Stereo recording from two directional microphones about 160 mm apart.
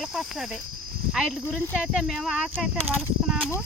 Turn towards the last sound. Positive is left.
turn(degrees=-5)  # may be behind; listen again after turning